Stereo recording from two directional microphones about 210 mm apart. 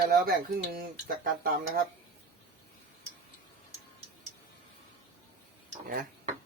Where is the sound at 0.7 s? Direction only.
45° right (ahead or behind).